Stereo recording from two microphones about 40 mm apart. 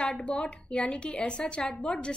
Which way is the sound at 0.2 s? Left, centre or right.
Left.